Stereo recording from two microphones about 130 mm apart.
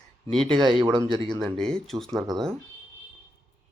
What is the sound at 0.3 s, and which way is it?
Speech, 5° left (ahead or behind).